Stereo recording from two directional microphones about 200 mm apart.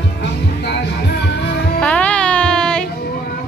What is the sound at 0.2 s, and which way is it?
Music, 55° left (ahead or behind).